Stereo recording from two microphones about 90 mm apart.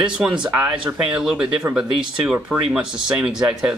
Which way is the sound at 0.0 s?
10° right (ahead or behind).